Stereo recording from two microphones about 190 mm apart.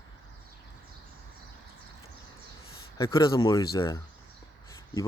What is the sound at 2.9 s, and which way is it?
Speech, 20° left (ahead or behind).